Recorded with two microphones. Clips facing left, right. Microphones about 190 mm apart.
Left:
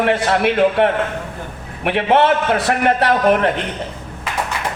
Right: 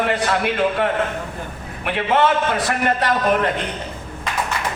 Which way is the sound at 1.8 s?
60° left (ahead or behind).